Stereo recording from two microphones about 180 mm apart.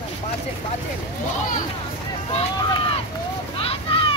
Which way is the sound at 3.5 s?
30° left (ahead or behind).